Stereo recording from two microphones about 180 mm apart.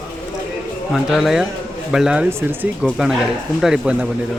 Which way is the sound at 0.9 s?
Centre (ahead or behind).